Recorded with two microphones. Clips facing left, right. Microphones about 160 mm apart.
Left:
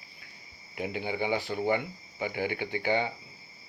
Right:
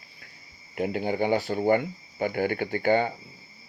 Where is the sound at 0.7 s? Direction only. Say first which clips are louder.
Right 6 dB; 45° right (ahead or behind).